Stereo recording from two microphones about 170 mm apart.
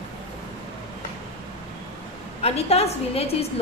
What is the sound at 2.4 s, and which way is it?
Speech, 35° left (ahead or behind).